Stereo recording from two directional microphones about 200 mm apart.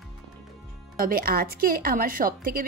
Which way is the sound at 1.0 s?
45° right (ahead or behind).